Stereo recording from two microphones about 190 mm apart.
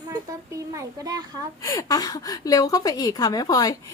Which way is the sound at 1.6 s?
20° left (ahead or behind).